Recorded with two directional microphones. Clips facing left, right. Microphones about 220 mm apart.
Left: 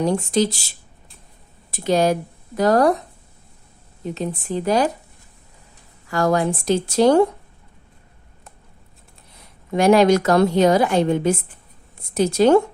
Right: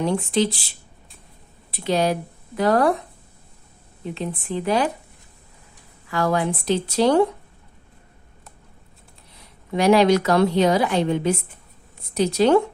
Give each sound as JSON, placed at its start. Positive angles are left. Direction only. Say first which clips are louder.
{"t": 0.0, "sound": "a woman's voice", "louder": "left 2 dB", "side_deg": 40}
{"t": 1.7, "sound": "a woman's voice", "louder": "left 3 dB", "side_deg": 45}
{"t": 4.0, "sound": "speech", "louder": "left 3 dB", "side_deg": 40}
{"t": 6.1, "sound": "a woman's voice", "louder": "left 3 dB", "side_deg": 45}
{"t": 9.7, "sound": "a woman's voice", "louder": "left 2 dB", "side_deg": 45}